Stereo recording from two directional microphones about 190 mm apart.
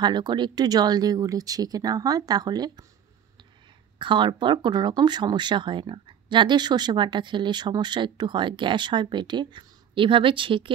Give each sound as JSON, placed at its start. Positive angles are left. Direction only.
{"t": 0.0, "sound": "speech", "side_deg": -20}
{"t": 4.0, "sound": "speech", "side_deg": -25}